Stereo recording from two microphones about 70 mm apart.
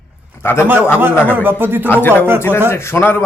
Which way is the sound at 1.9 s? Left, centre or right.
Left.